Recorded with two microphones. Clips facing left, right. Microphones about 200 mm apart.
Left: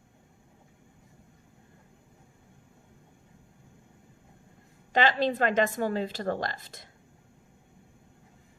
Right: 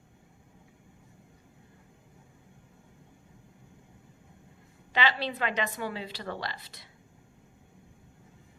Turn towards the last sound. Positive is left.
turn(degrees=45)  # may be behind; listen again after turning